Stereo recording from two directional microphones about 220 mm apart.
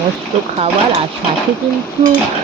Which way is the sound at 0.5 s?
30° right (ahead or behind).